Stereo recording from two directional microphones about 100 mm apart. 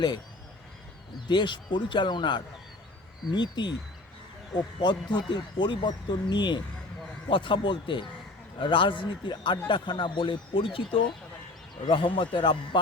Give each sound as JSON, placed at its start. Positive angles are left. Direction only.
{"t": 1.3, "sound": "speech", "side_deg": 50}
{"t": 4.8, "sound": "speech", "side_deg": 50}